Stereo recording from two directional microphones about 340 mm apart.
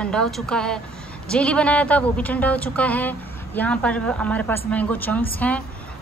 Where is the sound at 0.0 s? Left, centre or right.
Centre.